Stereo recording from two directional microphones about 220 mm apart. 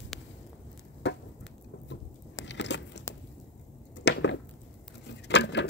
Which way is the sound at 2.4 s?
55° left (ahead or behind).